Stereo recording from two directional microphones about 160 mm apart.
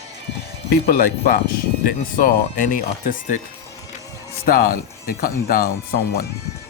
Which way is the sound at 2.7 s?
60° left (ahead or behind).